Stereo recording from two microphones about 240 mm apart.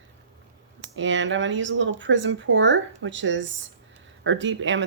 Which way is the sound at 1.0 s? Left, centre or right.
Right.